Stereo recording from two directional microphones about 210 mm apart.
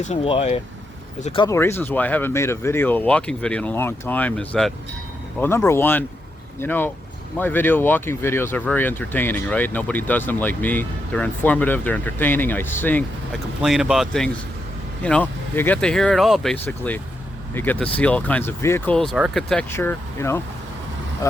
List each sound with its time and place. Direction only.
0.1 s speech: 30° left (ahead or behind)
1.5 s speech: 10° left (ahead or behind)